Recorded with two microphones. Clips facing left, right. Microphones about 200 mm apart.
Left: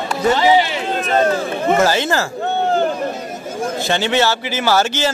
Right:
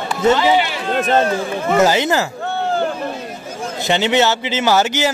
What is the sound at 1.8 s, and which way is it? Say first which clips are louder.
Speech: right 5 dB; 20° right (ahead or behind).